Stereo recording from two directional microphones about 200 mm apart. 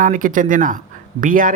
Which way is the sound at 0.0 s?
40° right (ahead or behind).